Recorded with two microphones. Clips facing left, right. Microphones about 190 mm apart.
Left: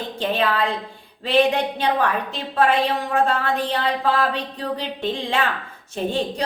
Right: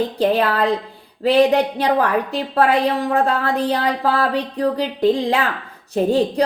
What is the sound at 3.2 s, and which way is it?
Speech, 35° right (ahead or behind).